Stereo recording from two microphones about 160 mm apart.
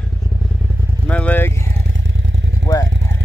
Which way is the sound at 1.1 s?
10° left (ahead or behind).